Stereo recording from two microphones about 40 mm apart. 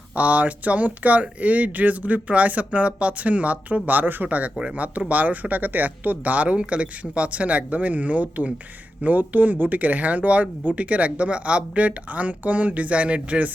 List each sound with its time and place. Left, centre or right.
0.2 s speech: right